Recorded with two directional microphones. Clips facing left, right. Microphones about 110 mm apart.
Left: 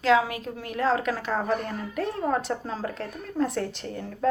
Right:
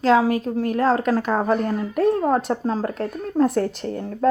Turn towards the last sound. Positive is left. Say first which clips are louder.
# right 7 dB
turn(degrees=-45)  # may be behind; listen again after turning